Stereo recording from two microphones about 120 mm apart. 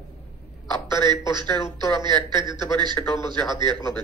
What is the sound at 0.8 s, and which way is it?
A man's voice, 40° right (ahead or behind).